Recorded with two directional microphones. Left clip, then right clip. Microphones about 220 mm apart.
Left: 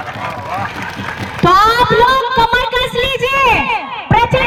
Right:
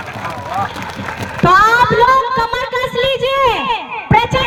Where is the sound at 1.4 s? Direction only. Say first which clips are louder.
Even; 30° left (ahead or behind).